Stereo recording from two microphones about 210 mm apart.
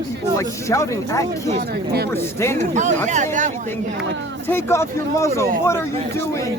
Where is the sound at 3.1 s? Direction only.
35° right (ahead or behind).